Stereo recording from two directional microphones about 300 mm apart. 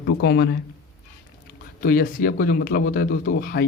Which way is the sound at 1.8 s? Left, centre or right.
Left.